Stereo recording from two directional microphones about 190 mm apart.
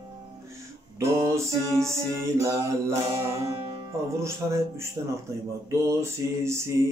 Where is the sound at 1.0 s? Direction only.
15° right (ahead or behind).